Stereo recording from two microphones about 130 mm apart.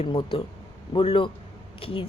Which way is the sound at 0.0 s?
40° left (ahead or behind).